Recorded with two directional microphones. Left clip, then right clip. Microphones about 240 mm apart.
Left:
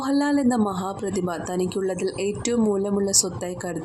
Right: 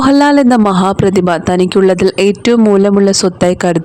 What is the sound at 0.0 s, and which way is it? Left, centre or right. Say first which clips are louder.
Speech: right 14 dB; right.